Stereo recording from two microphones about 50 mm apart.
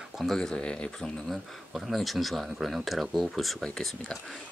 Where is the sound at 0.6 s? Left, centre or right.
Left.